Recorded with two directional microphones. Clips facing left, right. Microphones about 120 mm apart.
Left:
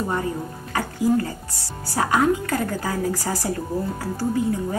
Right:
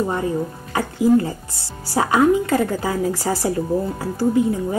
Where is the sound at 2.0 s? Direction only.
15° right (ahead or behind).